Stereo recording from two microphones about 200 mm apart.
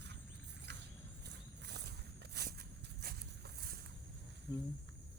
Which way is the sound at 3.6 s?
50° right (ahead or behind).